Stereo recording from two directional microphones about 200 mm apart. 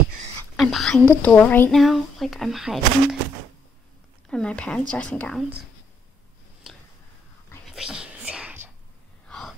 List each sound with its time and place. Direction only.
0.6 s whispering: centre (ahead or behind)
0.9 s speech: 10° left (ahead or behind)
4.3 s speech: 5° left (ahead or behind)
6.7 s a sound: centre (ahead or behind)
7.6 s whispering: centre (ahead or behind)